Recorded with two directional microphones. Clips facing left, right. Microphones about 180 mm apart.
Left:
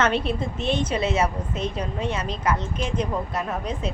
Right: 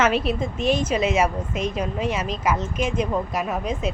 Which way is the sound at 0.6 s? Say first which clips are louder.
Right 3 dB; 25° left (ahead or behind).